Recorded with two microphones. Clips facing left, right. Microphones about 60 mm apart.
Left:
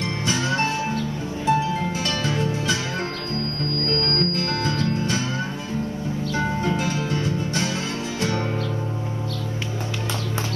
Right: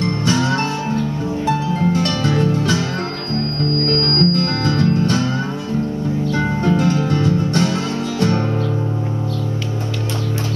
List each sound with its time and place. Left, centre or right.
0.0 s music: right
3.8 s music: right
6.3 s music: right